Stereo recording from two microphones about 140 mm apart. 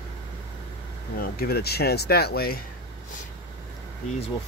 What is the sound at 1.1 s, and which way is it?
Speech, 90° left.